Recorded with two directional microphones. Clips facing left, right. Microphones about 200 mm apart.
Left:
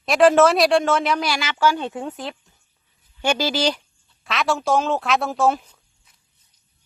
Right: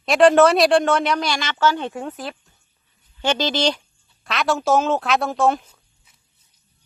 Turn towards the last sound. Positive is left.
turn(degrees=0)  # may be behind; listen again after turning